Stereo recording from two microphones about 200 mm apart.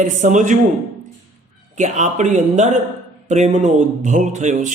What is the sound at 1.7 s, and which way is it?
Speech, 35° right (ahead or behind).